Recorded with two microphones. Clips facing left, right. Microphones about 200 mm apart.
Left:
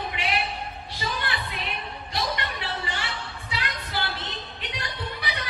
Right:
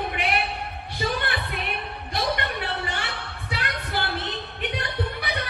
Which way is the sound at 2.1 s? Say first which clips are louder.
Right 3 dB; 55° right (ahead or behind).